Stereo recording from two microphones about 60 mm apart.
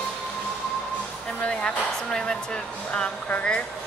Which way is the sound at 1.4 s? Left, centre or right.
Centre.